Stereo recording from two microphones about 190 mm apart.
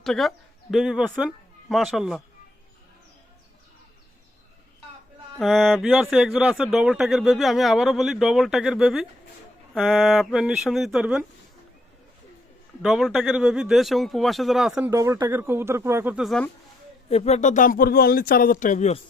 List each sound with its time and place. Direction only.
0.0 s speech: centre (ahead or behind)
5.4 s speech: centre (ahead or behind)
12.8 s speech: centre (ahead or behind)
14.8 s speech: 15° right (ahead or behind); by 16.5 s centre (ahead or behind)
17.1 s speech: 35° left (ahead or behind)